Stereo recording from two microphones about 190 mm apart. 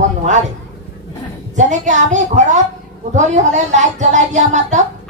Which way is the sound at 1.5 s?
40° right (ahead or behind).